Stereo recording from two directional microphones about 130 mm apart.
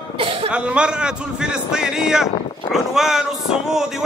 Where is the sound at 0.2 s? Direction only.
45° right (ahead or behind).